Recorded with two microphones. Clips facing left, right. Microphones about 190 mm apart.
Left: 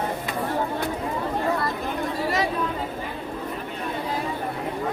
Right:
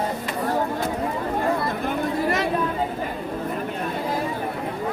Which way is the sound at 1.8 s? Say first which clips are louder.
Right 3 dB; 55° right (ahead or behind).